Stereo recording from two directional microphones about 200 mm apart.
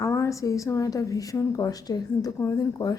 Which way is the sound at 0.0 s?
15° left (ahead or behind).